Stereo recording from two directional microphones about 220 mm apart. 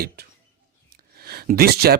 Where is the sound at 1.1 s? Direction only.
45° right (ahead or behind).